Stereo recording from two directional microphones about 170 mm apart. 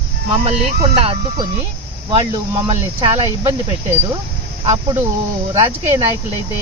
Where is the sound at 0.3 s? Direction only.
30° right (ahead or behind).